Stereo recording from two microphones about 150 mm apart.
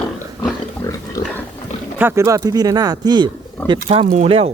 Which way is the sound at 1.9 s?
15° right (ahead or behind).